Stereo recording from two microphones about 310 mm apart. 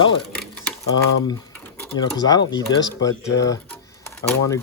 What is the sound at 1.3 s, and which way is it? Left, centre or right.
A man's voice, centre.